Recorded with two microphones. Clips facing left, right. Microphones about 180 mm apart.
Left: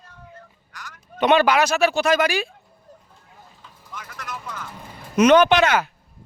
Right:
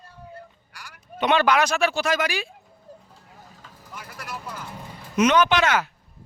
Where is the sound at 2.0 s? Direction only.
60° left (ahead or behind).